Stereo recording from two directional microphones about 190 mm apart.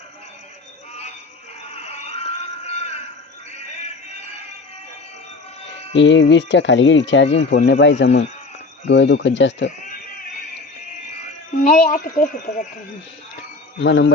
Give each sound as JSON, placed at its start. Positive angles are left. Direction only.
{"t": 1.7, "sound": "music", "side_deg": 35}
{"t": 6.0, "sound": "speech", "side_deg": 70}
{"t": 9.6, "sound": "a sound", "side_deg": 45}
{"t": 11.5, "sound": "speech", "side_deg": 45}
{"t": 13.7, "sound": "speech", "side_deg": 70}